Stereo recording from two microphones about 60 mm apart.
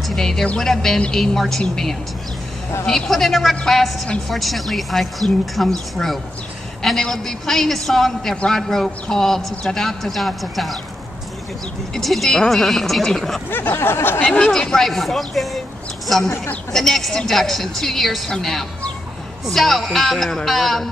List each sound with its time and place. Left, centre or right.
0.0 s a sound: centre
0.6 s a woman's voice: centre
3.1 s a woman's voice: centre
11.9 s a woman's voice: centre
13.5 s a sound: left
14.4 s a woman's voice: centre